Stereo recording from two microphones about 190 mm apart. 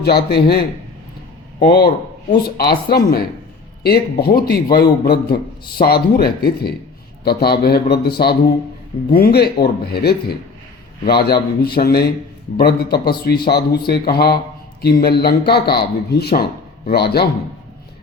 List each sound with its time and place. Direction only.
0.0 s a man's voice: 55° left (ahead or behind)
1.6 s a man's voice: 55° left (ahead or behind)